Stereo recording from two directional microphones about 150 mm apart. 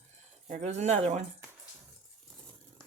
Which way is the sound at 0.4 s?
50° right (ahead or behind).